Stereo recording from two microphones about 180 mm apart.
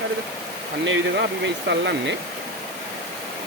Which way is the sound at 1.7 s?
70° right (ahead or behind).